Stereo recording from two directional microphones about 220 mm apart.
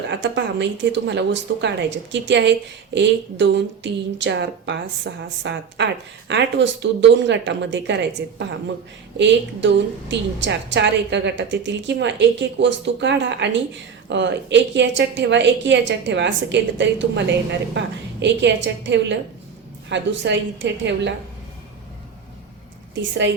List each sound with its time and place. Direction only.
0.1 s a woman's voice: 50° right (ahead or behind)